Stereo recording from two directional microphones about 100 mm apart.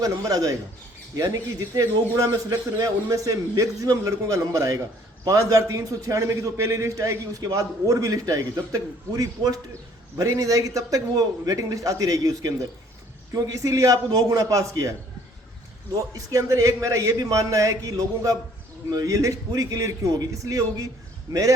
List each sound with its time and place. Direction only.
0.0 s a man's voice: 35° right (ahead or behind)
16.1 s a man's voice: 35° right (ahead or behind)